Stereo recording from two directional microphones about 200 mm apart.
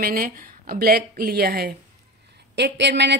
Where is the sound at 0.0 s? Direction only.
45° right (ahead or behind).